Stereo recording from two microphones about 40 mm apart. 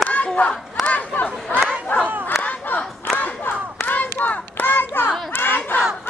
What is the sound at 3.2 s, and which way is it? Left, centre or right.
Hands, left.